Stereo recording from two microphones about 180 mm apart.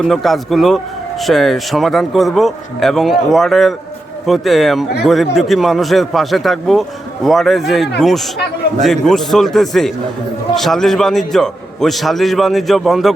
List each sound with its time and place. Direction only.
0.0 s a man's voice: centre (ahead or behind)